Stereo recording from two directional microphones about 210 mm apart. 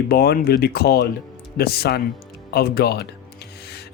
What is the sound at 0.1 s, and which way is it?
Speech, 50° left (ahead or behind).